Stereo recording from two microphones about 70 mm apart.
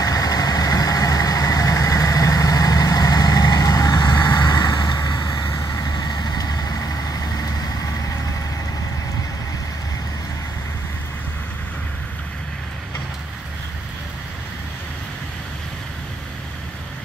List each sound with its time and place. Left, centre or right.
0.0 s vehicle: left
5.7 s vehicle: left